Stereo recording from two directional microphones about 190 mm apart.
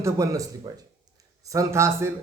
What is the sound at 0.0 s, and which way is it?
Speech, 15° right (ahead or behind).